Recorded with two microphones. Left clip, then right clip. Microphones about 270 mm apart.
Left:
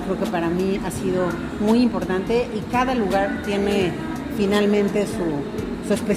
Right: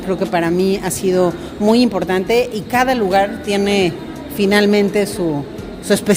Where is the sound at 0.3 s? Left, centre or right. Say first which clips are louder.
Right 9 dB; right.